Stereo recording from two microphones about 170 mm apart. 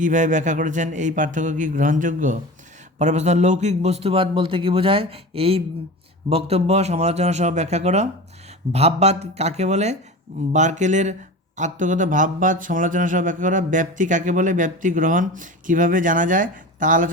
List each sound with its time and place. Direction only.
0.0 s a man's voice: 50° right (ahead or behind)